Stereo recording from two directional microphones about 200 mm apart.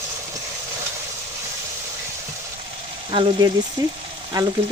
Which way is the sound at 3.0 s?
25° right (ahead or behind).